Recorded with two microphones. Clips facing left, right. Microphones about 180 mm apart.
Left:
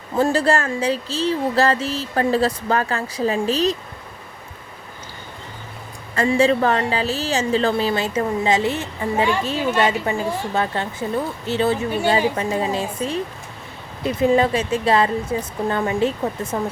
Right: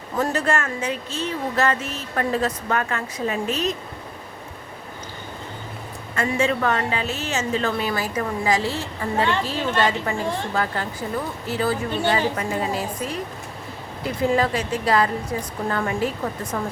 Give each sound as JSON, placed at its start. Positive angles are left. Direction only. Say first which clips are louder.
{"t": 0.2, "sound": "speech", "louder": "left 5 dB", "side_deg": 30}
{"t": 6.1, "sound": "a woman's voice", "louder": "left 5 dB", "side_deg": 30}